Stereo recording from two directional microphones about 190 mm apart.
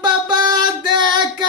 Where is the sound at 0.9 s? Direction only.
25° right (ahead or behind).